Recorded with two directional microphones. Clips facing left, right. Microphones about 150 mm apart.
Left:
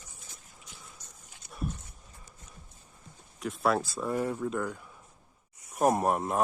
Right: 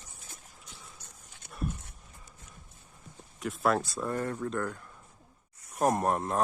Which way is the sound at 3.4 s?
Centre (ahead or behind).